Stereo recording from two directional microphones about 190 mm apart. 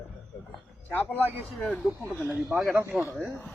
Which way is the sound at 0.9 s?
10° left (ahead or behind).